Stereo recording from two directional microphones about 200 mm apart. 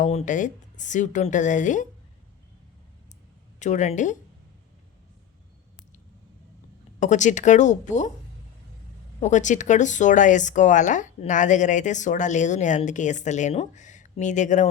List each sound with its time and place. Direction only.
0.0 s speech: 35° left (ahead or behind)
3.6 s speech: 35° left (ahead or behind)
7.0 s speech: 35° left (ahead or behind)
9.2 s speech: 35° left (ahead or behind)